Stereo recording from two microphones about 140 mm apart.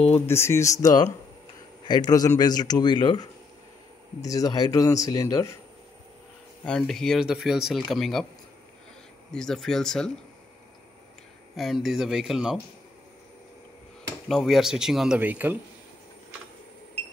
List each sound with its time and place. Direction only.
0.1 s speech: 20° left (ahead or behind)
6.6 s speech: 5° left (ahead or behind)
9.3 s speech: 5° left (ahead or behind)
11.5 s speech: centre (ahead or behind)
14.2 s speech: centre (ahead or behind)